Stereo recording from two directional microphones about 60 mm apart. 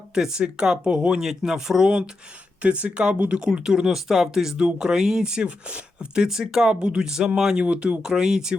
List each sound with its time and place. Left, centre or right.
0.1 s speech: centre
3.5 s speech: centre
7.6 s speech: centre